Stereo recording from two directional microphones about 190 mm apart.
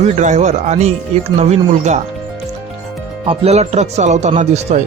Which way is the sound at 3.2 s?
30° right (ahead or behind).